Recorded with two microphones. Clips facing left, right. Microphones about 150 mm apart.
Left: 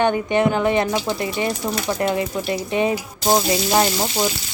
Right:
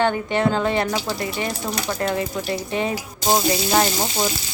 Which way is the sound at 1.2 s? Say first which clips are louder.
Left 3 dB; 20° left (ahead or behind).